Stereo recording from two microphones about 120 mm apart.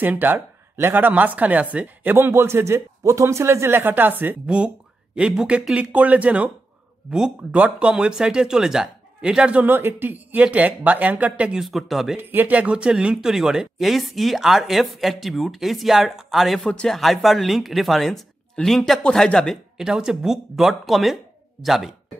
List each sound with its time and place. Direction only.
0.0 s speech: 15° right (ahead or behind)
12.2 s speech: 15° right (ahead or behind); by 19.6 s 5° left (ahead or behind)
19.8 s speech: 5° right (ahead or behind)